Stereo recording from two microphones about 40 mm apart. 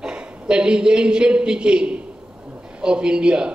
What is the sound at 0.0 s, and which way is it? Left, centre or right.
A woman's voice, right.